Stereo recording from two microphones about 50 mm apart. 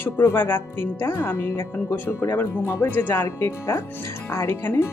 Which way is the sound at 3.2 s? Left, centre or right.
Left.